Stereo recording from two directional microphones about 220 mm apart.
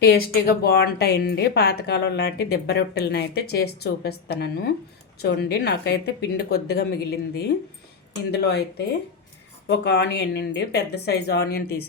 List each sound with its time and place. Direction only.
0.0 s a woman's voice: 45° left (ahead or behind)